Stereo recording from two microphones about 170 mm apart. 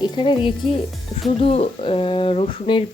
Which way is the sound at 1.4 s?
35° left (ahead or behind).